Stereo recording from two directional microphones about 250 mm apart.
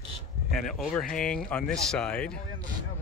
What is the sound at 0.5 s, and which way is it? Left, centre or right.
Speech, centre.